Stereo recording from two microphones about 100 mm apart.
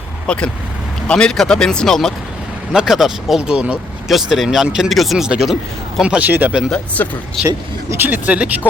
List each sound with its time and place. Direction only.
0.3 s speech: 10° left (ahead or behind)
2.7 s speech: 5° right (ahead or behind)
6.7 s speech: 15° left (ahead or behind)
7.4 s speech: 25° right (ahead or behind)